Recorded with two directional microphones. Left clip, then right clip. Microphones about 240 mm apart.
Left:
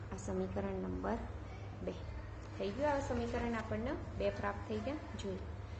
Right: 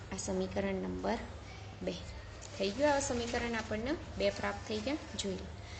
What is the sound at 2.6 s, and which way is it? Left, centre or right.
A woman's voice, right.